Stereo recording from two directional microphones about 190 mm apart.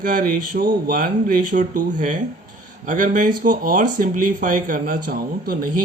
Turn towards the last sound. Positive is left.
turn(degrees=-45)  # may be behind; listen again after turning